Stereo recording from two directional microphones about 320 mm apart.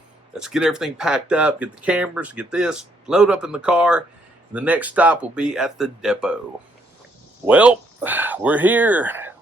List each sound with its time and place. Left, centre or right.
0.3 s speech: centre
7.4 s speech: centre